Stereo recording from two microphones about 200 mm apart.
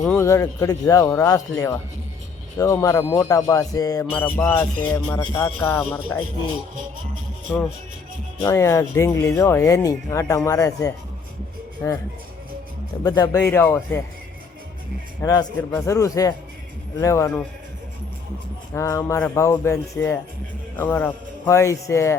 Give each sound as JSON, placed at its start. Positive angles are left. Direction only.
{"t": 0.0, "sound": "speech", "side_deg": 10}
{"t": 8.4, "sound": "speech", "side_deg": 15}
{"t": 13.0, "sound": "speech", "side_deg": 20}
{"t": 15.2, "sound": "speech", "side_deg": 15}
{"t": 18.7, "sound": "speech", "side_deg": 15}